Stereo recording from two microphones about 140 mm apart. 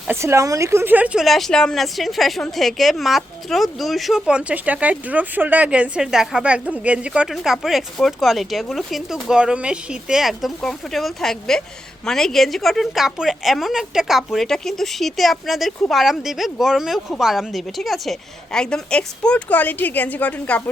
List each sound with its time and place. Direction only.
0.1 s a woman's voice: 20° right (ahead or behind); by 20.6 s 10° left (ahead or behind)